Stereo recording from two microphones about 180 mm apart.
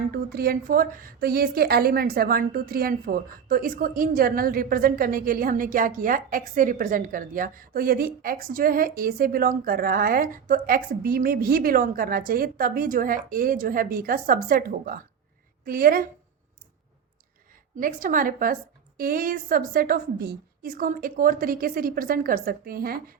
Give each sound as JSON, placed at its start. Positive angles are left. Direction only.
{"t": 0.1, "sound": "a woman's voice", "side_deg": -60}
{"t": 17.7, "sound": "a woman's voice", "side_deg": -50}